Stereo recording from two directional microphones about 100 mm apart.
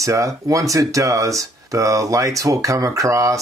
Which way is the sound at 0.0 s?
30° right (ahead or behind).